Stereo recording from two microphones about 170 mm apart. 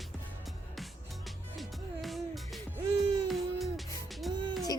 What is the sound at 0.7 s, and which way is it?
Music, centre (ahead or behind).